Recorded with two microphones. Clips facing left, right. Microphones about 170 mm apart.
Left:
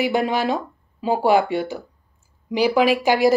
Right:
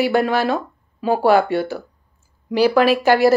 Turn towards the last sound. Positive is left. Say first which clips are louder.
# right 2 dB
turn(degrees=15)  # may be behind; listen again after turning